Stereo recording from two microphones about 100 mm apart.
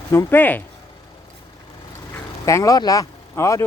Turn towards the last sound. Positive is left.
turn(degrees=30)  # may be behind; listen again after turning